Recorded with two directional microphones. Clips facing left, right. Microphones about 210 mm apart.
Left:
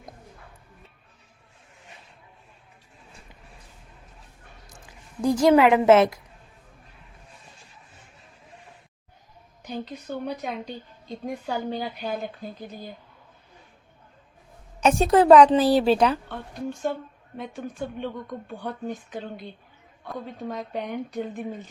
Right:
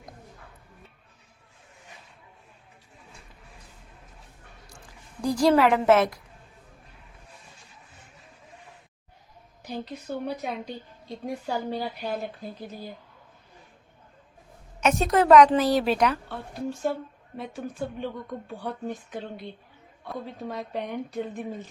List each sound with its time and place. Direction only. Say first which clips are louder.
5.2 s a woman's voice: left 3 dB; 20° left (ahead or behind)
9.6 s a woman's voice: left 1 dB; centre (ahead or behind)
14.8 s a woman's voice: left 4 dB; 30° left (ahead or behind)
16.3 s a woman's voice: even; 5° right (ahead or behind)